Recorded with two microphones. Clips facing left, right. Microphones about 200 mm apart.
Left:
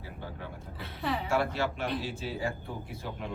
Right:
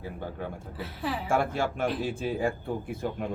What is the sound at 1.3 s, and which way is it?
Speech, 50° right (ahead or behind).